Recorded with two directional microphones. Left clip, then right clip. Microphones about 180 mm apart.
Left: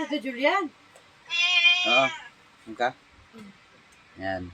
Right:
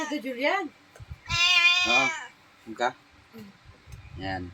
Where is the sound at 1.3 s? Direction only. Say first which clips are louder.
Even; 60° right (ahead or behind).